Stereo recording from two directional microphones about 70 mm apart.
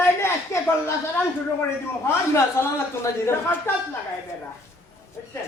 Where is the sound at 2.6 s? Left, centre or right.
Left.